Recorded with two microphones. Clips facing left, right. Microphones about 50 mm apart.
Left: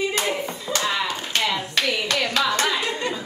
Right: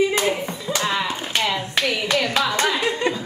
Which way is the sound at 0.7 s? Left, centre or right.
Centre.